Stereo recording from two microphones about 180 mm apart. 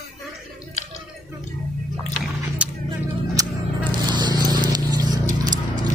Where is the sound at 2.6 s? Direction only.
5° right (ahead or behind).